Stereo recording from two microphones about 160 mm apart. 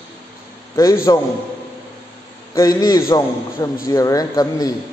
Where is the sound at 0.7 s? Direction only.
20° left (ahead or behind).